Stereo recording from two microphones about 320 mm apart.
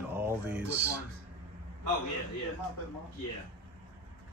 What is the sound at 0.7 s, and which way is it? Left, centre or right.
Speech, right.